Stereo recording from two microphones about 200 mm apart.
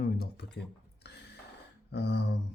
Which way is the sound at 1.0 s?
60° left (ahead or behind).